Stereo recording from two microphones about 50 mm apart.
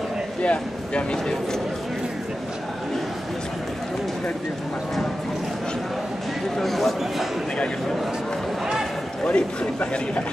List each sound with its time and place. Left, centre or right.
0.4 s speech: left
6.6 s a sound: centre
9.2 s a man's voice: left